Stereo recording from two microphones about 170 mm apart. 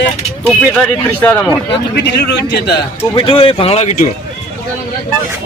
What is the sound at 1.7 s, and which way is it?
A man's voice, 75° left (ahead or behind).